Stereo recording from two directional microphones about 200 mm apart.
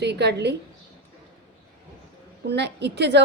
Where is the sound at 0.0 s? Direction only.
60° right (ahead or behind).